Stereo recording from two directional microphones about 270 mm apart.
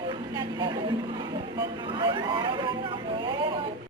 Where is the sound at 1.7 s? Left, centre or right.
Centre.